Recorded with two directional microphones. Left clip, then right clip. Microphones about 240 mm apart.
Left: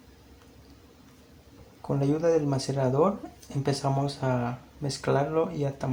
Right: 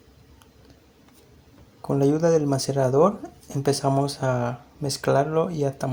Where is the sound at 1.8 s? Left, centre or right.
Right.